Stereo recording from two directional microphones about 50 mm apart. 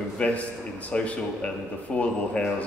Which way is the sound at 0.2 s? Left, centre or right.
Left.